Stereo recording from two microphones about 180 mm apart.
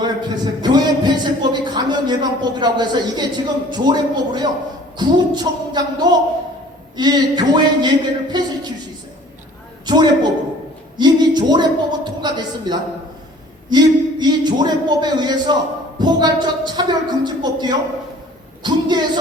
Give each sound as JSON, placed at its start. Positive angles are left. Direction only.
{"t": 0.0, "sound": "a man's voice", "side_deg": -25}
{"t": 9.8, "sound": "a sound", "side_deg": -25}
{"t": 13.7, "sound": "speech", "side_deg": -25}